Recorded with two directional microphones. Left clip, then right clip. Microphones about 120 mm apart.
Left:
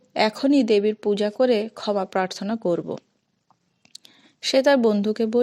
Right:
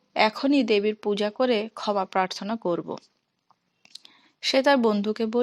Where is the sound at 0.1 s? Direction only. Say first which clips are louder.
Left 2 dB; 45° left (ahead or behind).